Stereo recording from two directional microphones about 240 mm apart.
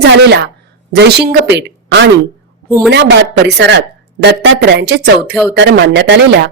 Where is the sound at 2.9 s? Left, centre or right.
Right.